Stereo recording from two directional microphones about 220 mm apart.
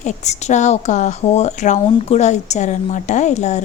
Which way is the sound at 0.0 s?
30° left (ahead or behind).